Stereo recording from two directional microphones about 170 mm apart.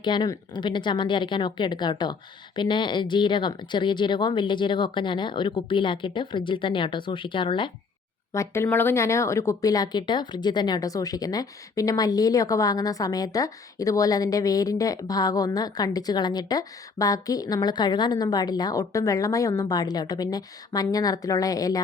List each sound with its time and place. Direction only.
0.0 s speech: 25° left (ahead or behind)
8.3 s speech: 15° left (ahead or behind)